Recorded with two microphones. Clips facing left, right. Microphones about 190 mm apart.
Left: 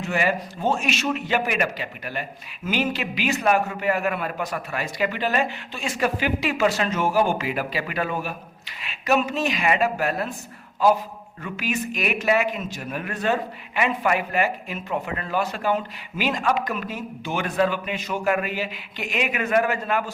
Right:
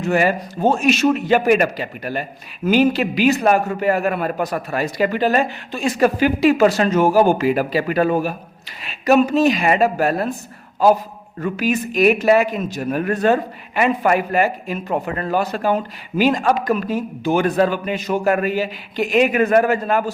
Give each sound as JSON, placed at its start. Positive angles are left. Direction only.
{"t": 0.0, "sound": "a man's voice", "side_deg": -40}
{"t": 11.3, "sound": "a man's voice", "side_deg": -40}